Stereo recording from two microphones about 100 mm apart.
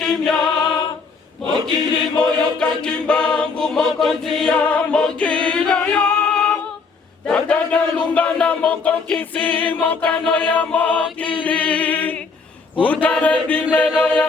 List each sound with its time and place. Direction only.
0.0 s music: centre (ahead or behind)
2.1 s chant: 10° left (ahead or behind)
7.3 s a sound: 10° left (ahead or behind)
9.5 s chant: 20° left (ahead or behind)
11.4 s a sound: 15° left (ahead or behind)
12.8 s chant: 15° left (ahead or behind)